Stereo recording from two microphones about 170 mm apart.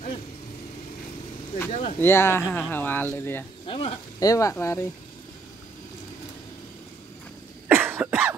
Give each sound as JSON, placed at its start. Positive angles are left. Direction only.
{"t": 1.7, "sound": "speech", "side_deg": 40}
{"t": 2.0, "sound": "speech", "side_deg": 15}
{"t": 3.6, "sound": "speech", "side_deg": 30}
{"t": 7.6, "sound": "cough", "side_deg": -10}